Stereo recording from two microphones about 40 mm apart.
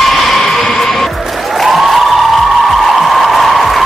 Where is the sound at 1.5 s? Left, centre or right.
Centre.